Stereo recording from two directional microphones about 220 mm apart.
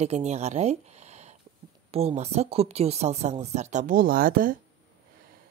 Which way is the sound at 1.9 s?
30° right (ahead or behind).